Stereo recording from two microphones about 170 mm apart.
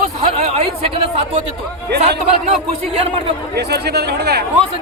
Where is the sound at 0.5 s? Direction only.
35° right (ahead or behind).